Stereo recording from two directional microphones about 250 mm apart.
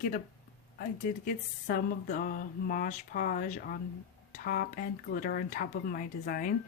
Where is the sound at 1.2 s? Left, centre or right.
Left.